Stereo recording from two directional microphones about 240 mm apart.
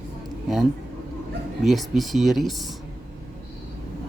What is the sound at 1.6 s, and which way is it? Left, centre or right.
Speech, centre.